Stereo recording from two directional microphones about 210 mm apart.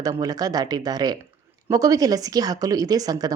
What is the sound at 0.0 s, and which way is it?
A woman's voice, 20° right (ahead or behind).